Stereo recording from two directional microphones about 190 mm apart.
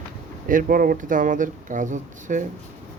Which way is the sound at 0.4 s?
45° right (ahead or behind).